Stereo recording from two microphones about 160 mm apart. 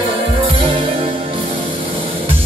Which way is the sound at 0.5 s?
35° right (ahead or behind).